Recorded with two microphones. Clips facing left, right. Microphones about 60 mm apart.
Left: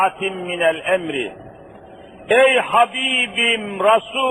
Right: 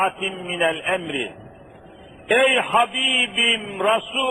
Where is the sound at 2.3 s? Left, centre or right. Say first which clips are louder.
Left 4 dB; centre.